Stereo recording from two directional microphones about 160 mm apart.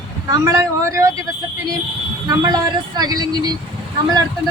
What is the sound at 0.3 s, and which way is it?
Speech, 20° right (ahead or behind).